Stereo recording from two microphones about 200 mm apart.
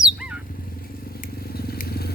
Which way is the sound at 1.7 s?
50° left (ahead or behind).